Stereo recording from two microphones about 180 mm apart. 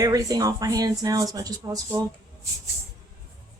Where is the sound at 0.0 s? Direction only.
20° right (ahead or behind).